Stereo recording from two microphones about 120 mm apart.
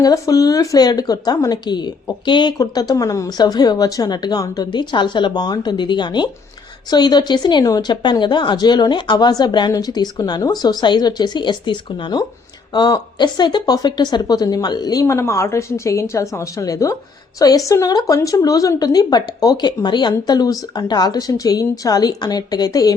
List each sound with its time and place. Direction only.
0.0 s speech: 30° left (ahead or behind)